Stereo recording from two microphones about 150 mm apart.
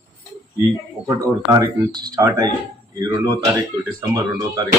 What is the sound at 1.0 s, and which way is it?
Speech, 25° right (ahead or behind).